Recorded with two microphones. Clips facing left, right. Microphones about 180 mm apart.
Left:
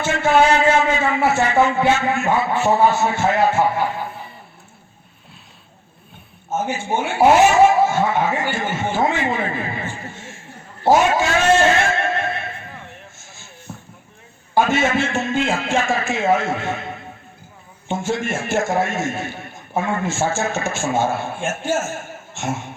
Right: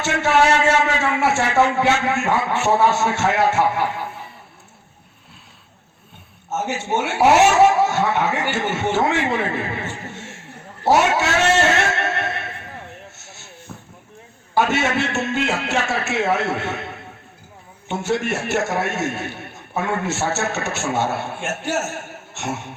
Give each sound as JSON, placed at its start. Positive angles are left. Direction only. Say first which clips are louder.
{"t": 0.0, "sound": "a man's voice", "louder": "left 2 dB", "side_deg": -80}
{"t": 6.5, "sound": "a man's voice", "louder": "left 1 dB", "side_deg": -75}
{"t": 13.1, "sound": "a sound", "louder": "right 1 dB", "side_deg": -75}
{"t": 13.7, "sound": "a sound", "louder": "left 2 dB", "side_deg": 35}
{"t": 14.6, "sound": "speech", "louder": "left 2 dB", "side_deg": -70}
{"t": 17.9, "sound": "speech", "louder": "right 1 dB", "side_deg": -70}